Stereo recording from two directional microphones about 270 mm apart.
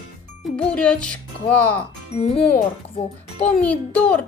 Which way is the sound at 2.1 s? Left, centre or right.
Left.